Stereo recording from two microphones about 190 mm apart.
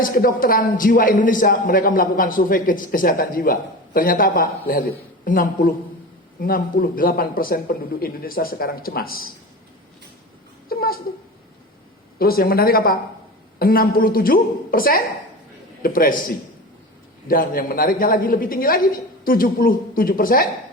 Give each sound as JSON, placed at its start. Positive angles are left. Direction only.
{"t": 0.0, "sound": "a man's voice", "side_deg": 50}
{"t": 10.7, "sound": "a sound", "side_deg": 50}
{"t": 12.2, "sound": "a man's voice", "side_deg": 50}
{"t": 17.2, "sound": "a man's voice", "side_deg": 50}